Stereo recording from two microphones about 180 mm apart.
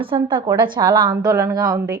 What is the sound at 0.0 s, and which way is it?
A woman's voice, 30° right (ahead or behind).